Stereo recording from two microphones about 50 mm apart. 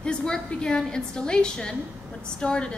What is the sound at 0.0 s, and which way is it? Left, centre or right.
A woman's voice, centre.